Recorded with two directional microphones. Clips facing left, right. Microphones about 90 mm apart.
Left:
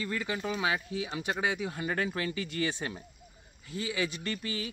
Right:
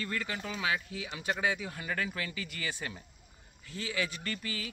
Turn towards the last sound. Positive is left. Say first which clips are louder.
# left 3 dB
turn(degrees=25)  # may be behind; listen again after turning